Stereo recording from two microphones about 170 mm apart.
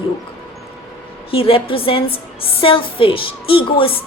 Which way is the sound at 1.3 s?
35° left (ahead or behind).